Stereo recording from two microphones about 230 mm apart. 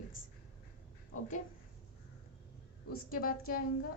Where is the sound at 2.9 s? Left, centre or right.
Left.